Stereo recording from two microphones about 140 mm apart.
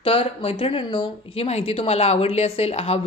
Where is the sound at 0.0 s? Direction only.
40° left (ahead or behind).